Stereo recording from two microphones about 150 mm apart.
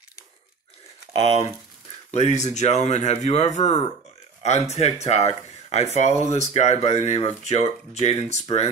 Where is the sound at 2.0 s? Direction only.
50° left (ahead or behind).